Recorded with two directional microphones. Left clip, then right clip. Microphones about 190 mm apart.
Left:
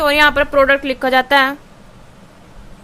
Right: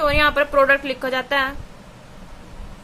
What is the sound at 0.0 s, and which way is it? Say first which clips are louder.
A woman's voice: left 5 dB; 50° left (ahead or behind).